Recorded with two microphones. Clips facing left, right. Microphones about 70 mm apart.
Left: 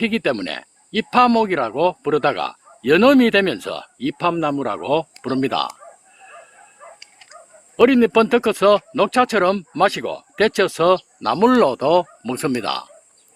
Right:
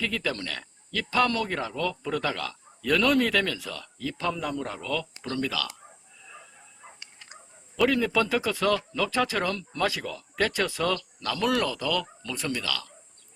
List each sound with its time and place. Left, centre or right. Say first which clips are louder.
0.0 s speech: left 10 dB; left
6.2 s bow-wow: left 6 dB; left
6.8 s a sound: left 9 dB; left
7.8 s speech: left 11 dB; left
11.2 s speech: left 11 dB; left